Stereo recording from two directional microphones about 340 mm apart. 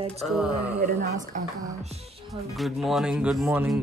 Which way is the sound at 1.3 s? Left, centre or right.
Right.